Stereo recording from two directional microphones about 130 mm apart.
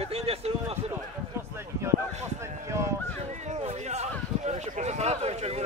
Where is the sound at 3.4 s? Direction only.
60° right (ahead or behind).